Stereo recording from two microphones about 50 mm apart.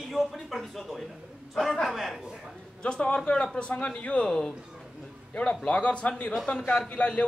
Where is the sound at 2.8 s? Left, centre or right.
Centre.